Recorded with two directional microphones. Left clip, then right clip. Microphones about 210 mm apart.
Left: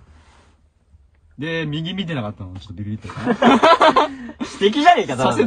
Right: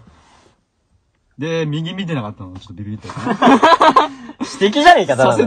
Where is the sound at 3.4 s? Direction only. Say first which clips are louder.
Right 2 dB; centre (ahead or behind).